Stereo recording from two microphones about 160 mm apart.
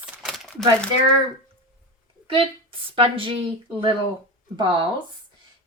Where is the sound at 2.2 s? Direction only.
35° right (ahead or behind).